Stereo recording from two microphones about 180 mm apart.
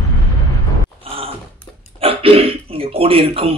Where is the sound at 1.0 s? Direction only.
30° right (ahead or behind).